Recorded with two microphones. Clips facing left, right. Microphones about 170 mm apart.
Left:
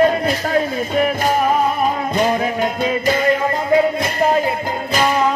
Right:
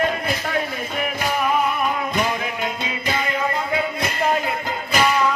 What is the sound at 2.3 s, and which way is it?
Music, 45° left (ahead or behind).